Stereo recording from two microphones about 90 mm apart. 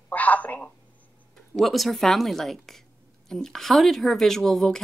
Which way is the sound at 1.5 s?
Centre (ahead or behind).